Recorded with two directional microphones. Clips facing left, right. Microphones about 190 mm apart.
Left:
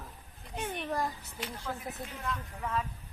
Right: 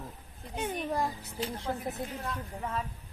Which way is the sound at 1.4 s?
30° right (ahead or behind).